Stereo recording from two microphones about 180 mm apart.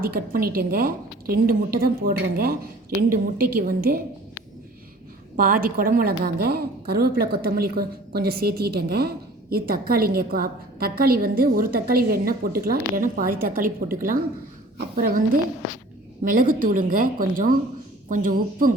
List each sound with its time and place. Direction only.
0.0 s a woman's voice: 55° right (ahead or behind)
5.4 s a woman's voice: 55° right (ahead or behind)
16.2 s a woman's voice: 50° right (ahead or behind)